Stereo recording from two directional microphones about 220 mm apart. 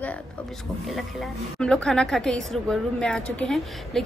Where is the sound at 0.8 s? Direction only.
Centre (ahead or behind).